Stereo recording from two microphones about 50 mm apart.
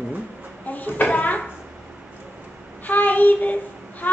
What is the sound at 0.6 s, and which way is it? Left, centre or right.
Speech, left.